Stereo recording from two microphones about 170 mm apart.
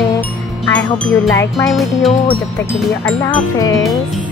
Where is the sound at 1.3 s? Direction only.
20° left (ahead or behind).